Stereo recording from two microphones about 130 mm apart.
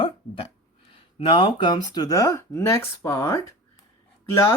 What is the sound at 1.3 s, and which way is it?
Speech, 40° left (ahead or behind).